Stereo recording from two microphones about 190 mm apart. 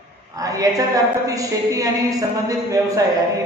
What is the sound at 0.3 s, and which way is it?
A woman's voice, 20° right (ahead or behind).